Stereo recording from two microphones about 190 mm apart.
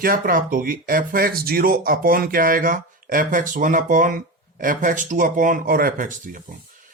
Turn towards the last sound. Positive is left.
turn(degrees=-45)  # may be behind; listen again after turning